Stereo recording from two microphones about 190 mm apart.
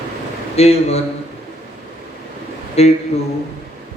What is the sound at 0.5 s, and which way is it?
Speech, 35° left (ahead or behind).